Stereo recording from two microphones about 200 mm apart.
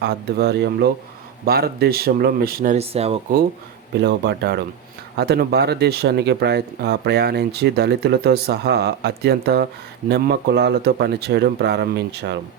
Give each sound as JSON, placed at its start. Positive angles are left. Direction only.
{"t": 0.0, "sound": "a man's voice", "side_deg": -55}
{"t": 2.7, "sound": "speech", "side_deg": -30}
{"t": 4.0, "sound": "a man's voice", "side_deg": -55}